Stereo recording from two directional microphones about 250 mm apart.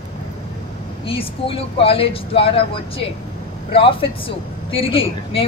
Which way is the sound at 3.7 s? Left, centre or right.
Left.